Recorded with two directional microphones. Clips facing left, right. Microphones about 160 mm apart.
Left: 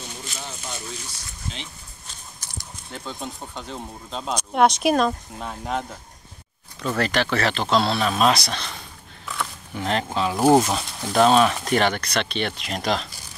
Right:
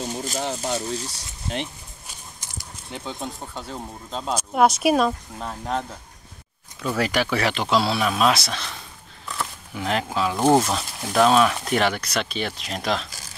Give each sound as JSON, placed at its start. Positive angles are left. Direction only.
{"t": 0.0, "sound": "a sound", "side_deg": -40}
{"t": 0.7, "sound": "speech", "side_deg": -35}
{"t": 2.0, "sound": "a sound", "side_deg": -10}
{"t": 3.2, "sound": "speech", "side_deg": -5}
{"t": 6.8, "sound": "speech", "side_deg": -10}
{"t": 10.3, "sound": "speech", "side_deg": 10}